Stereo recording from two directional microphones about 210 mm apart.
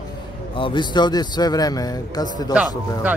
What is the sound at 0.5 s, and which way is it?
Speech, 25° left (ahead or behind).